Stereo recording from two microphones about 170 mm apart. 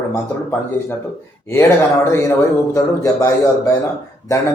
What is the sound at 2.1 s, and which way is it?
A man's voice, 15° left (ahead or behind).